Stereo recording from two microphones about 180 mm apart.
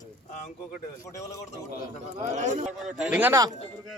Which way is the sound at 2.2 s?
40° right (ahead or behind).